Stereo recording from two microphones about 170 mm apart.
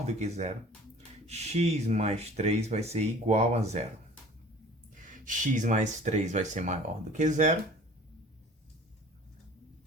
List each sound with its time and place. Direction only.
0.0 s speech: 40° right (ahead or behind)
5.1 s speech: 50° right (ahead or behind)